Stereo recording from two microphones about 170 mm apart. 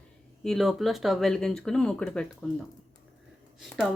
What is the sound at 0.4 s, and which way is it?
Speech, centre (ahead or behind).